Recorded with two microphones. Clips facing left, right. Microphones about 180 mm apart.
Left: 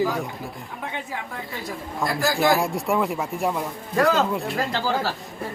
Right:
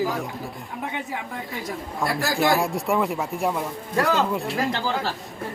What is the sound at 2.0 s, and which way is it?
Speech, centre (ahead or behind).